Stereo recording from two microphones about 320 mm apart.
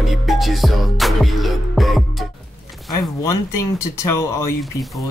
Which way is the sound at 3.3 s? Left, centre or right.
Left.